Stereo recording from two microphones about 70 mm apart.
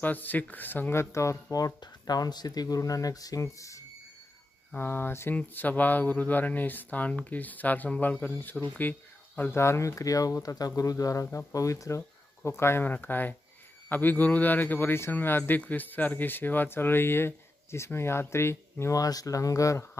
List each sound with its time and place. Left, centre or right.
0.0 s a man's voice: left
1.1 s speech: left
1.5 s speech: left
4.7 s a man's voice: left
9.4 s speech: left
12.4 s a man's voice: left
18.9 s speech: left